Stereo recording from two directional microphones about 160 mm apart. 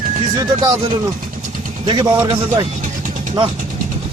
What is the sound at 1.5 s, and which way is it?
Vehicle, 55° right (ahead or behind).